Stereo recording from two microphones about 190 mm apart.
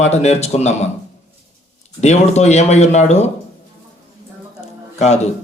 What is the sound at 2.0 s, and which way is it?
Speech, 35° left (ahead or behind).